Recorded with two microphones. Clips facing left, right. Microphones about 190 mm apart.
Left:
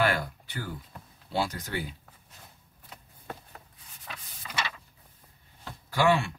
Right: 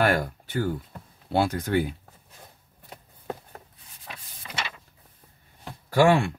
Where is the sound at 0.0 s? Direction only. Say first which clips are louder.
Right 4 dB; 45° right (ahead or behind).